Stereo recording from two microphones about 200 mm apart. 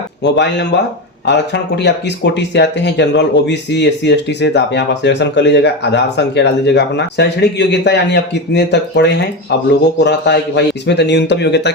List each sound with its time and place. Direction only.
0.2 s speech: 60° left (ahead or behind)
1.7 s speech: 60° left (ahead or behind)